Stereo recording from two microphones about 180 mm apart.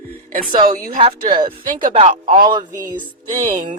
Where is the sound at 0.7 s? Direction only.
50° right (ahead or behind).